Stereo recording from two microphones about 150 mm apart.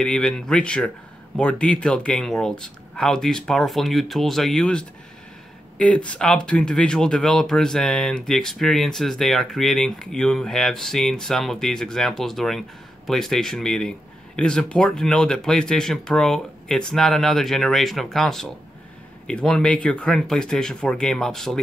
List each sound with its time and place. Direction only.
0.0 s speech: 5° left (ahead or behind)